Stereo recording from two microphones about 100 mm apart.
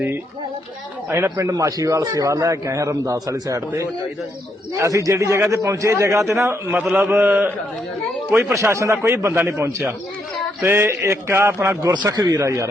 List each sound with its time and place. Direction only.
1.1 s a man's voice: 30° right (ahead or behind)
4.7 s a man's voice: 35° right (ahead or behind); by 8.5 s 15° right (ahead or behind)
8.5 s a man's voice: 30° right (ahead or behind)
12.0 s a man's voice: 40° right (ahead or behind)
12.4 s a man's voice: 30° right (ahead or behind)